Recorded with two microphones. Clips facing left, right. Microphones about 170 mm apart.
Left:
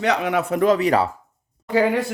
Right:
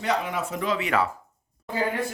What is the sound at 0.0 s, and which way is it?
Speech, 75° left (ahead or behind).